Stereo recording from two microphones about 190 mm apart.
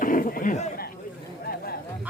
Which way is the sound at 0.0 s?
45° left (ahead or behind).